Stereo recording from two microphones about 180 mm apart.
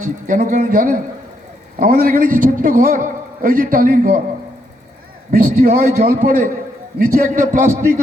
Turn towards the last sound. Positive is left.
turn(degrees=-45)  # may be behind; listen again after turning